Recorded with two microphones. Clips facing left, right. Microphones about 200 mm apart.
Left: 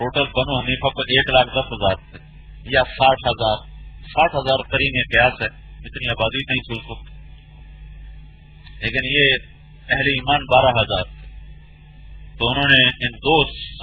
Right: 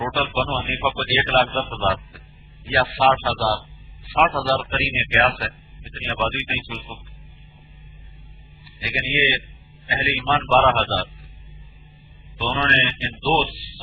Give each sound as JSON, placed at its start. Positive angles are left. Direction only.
{"t": 0.0, "sound": "speech", "side_deg": 25}
{"t": 8.8, "sound": "speech", "side_deg": 25}
{"t": 12.4, "sound": "speech", "side_deg": 25}